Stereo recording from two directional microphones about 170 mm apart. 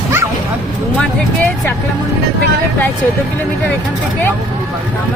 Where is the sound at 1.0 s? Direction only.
10° left (ahead or behind).